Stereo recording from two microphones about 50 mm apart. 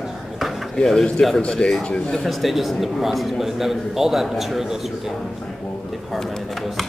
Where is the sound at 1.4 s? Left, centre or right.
Left.